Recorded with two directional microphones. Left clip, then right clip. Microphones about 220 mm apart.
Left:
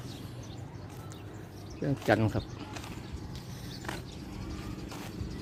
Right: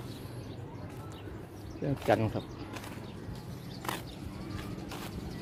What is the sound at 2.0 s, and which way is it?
Speech, 20° left (ahead or behind).